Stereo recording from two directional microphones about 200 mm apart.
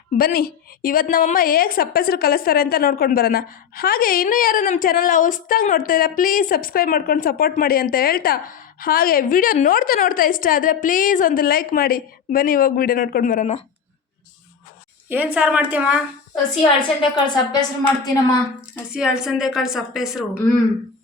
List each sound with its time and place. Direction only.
0.1 s a woman's voice: 45° left (ahead or behind)
15.1 s a woman's voice: 10° right (ahead or behind)
17.0 s a woman's voice: 20° left (ahead or behind)
18.9 s a woman's voice: 5° right (ahead or behind)